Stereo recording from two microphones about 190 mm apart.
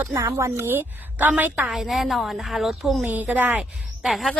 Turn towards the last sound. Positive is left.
turn(degrees=0)  # may be behind; listen again after turning